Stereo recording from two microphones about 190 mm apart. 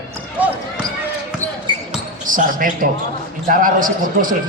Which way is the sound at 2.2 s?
45° right (ahead or behind).